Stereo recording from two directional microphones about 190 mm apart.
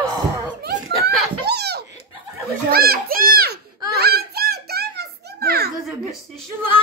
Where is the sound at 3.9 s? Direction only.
55° right (ahead or behind).